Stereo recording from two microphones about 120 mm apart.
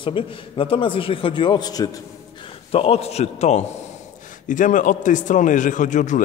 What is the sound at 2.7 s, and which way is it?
Speech, 55° left (ahead or behind).